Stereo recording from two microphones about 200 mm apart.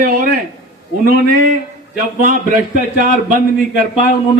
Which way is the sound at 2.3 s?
40° right (ahead or behind).